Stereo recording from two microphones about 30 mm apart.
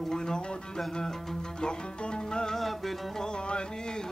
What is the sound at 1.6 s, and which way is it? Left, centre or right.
Music, left.